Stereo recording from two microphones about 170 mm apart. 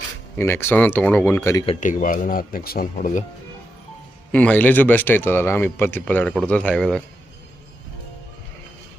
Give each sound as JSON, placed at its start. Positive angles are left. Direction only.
{"t": 0.3, "sound": "speech", "side_deg": 15}
{"t": 1.8, "sound": "speech", "side_deg": 50}
{"t": 4.3, "sound": "speech", "side_deg": 10}